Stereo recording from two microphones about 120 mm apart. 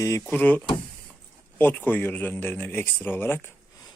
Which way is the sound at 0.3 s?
15° left (ahead or behind).